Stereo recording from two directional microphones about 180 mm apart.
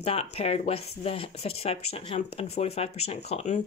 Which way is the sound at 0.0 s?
35° left (ahead or behind).